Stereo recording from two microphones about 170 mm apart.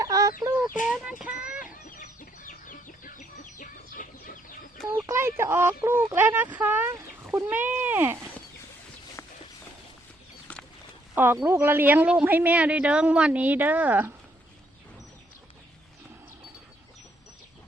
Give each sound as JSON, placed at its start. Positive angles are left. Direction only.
{"t": 0.0, "sound": "chicken", "side_deg": -20}
{"t": 1.3, "sound": "speech", "side_deg": -10}
{"t": 2.0, "sound": "chicken", "side_deg": 50}
{"t": 4.9, "sound": "speech", "side_deg": -15}
{"t": 10.5, "sound": "a sound", "side_deg": 5}
{"t": 11.1, "sound": "speech", "side_deg": -15}